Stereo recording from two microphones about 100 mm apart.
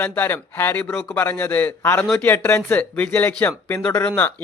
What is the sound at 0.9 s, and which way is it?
Speech, 5° left (ahead or behind).